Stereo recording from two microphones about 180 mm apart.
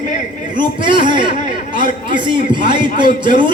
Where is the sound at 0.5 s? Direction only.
25° right (ahead or behind).